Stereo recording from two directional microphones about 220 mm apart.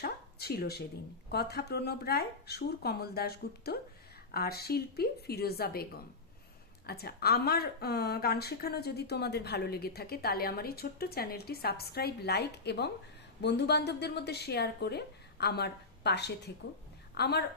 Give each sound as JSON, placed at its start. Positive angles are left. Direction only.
{"t": 0.0, "sound": "speech", "side_deg": 45}
{"t": 6.8, "sound": "speech", "side_deg": 45}